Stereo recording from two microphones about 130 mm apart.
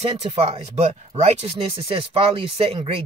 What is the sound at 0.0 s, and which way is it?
Speech, 50° right (ahead or behind).